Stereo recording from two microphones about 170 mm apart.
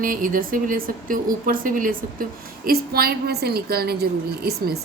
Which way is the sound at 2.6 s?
65° right (ahead or behind).